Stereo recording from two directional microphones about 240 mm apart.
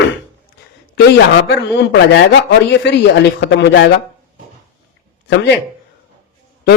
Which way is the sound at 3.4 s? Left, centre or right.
Left.